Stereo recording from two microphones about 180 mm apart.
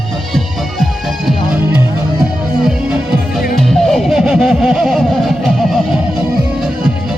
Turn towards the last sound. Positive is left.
turn(degrees=0)  # may be behind; listen again after turning